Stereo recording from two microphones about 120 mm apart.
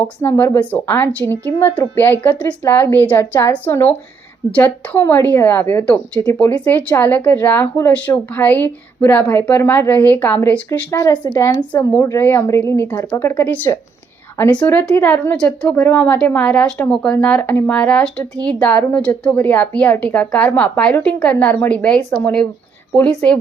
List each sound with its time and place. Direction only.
0.2 s a woman's voice: 20° left (ahead or behind)
11.0 s a woman's voice: 35° left (ahead or behind); by 23.4 s 10° left (ahead or behind)